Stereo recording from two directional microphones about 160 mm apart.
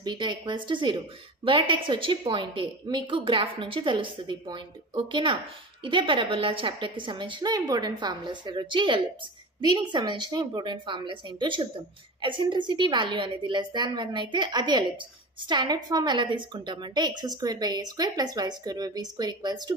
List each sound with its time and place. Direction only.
0.0 s a woman's voice: 30° right (ahead or behind)